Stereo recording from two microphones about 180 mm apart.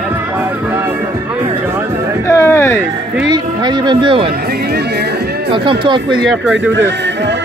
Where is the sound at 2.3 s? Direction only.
15° left (ahead or behind).